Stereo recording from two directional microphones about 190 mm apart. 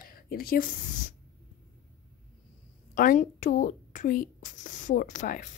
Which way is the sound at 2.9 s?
45° left (ahead or behind).